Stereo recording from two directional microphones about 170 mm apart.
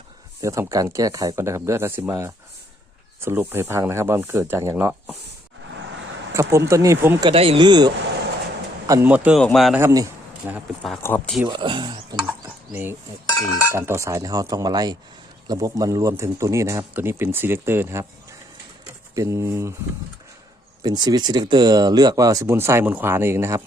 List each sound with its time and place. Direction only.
0.4 s speech: 20° right (ahead or behind)
6.3 s speech: 15° right (ahead or behind)
7.3 s speech: 35° right (ahead or behind)
8.9 s speech: 10° right (ahead or behind)
9.4 s speech: centre (ahead or behind)
9.8 s speech: 20° right (ahead or behind)
10.4 s speech: 5° right (ahead or behind)
10.9 s speech: 10° left (ahead or behind)
11.4 s speech: 25° right (ahead or behind)
12.7 s speech: 10° right (ahead or behind)
20.8 s speech: 25° right (ahead or behind)